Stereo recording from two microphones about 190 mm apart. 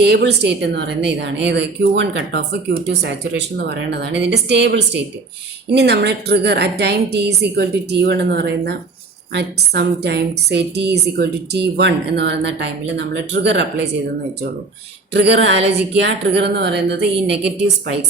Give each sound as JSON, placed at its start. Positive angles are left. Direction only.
{"t": 0.0, "sound": "a woman's voice", "side_deg": -60}
{"t": 15.1, "sound": "a woman's voice", "side_deg": -70}